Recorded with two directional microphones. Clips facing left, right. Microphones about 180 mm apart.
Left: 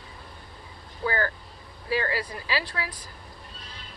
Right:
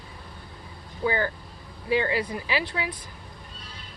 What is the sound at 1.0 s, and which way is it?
Speech, 15° right (ahead or behind).